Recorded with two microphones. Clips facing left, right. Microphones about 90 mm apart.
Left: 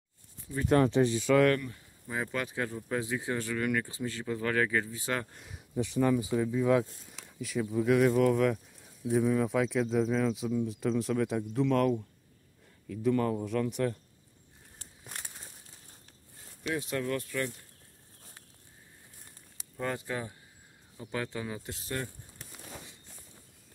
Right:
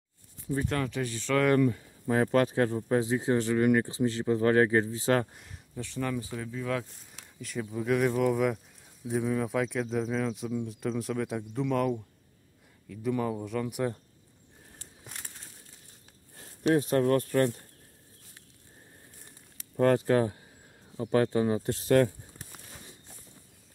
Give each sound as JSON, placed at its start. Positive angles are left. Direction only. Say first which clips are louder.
{"t": 0.7, "sound": "speech", "louder": "left 7 dB", "side_deg": 30}
{"t": 1.1, "sound": "speech", "louder": "left 3 dB", "side_deg": 10}
{"t": 2.0, "sound": "speech", "louder": "right 10 dB", "side_deg": -50}
{"t": 5.8, "sound": "speech", "louder": "left 6 dB", "side_deg": 15}
{"t": 7.1, "sound": "a man's voice", "louder": "left 3 dB", "side_deg": 0}
{"t": 16.7, "sound": "speech", "louder": "right 8 dB", "side_deg": -45}
{"t": 19.8, "sound": "speech", "louder": "right 11 dB", "side_deg": -65}
{"t": 21.1, "sound": "speech", "louder": "right 11 dB", "side_deg": -45}